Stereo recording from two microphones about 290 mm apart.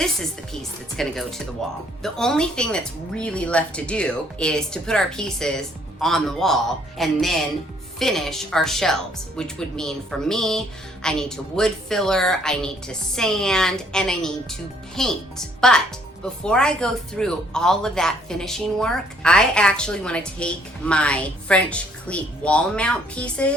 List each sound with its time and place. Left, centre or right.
0.9 s speech: centre